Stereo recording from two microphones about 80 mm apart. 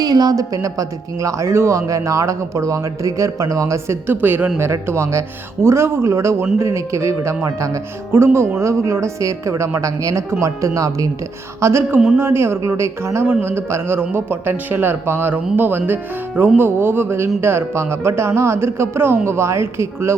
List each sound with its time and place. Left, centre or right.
0.0 s a man's voice: right
4.5 s a man's voice: right
11.6 s a man's voice: right